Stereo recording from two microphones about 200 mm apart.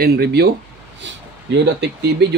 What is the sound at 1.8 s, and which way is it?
Speech, 55° right (ahead or behind).